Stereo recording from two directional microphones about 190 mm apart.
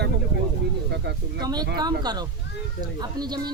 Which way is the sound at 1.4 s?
20° right (ahead or behind).